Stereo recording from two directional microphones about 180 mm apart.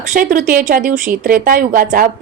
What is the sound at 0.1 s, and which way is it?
Speech, 45° right (ahead or behind).